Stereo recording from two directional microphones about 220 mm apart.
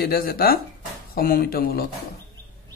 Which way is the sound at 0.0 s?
45° left (ahead or behind).